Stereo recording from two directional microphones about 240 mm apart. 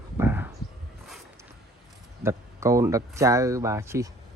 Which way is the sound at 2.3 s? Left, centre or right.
Centre.